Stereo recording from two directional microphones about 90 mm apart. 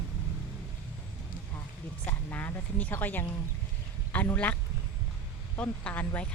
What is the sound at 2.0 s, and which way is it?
Speech, 20° left (ahead or behind).